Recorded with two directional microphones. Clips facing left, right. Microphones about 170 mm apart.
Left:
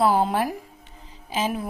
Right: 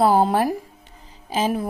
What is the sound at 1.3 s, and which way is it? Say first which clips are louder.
Speech: right 4 dB; 35° right (ahead or behind).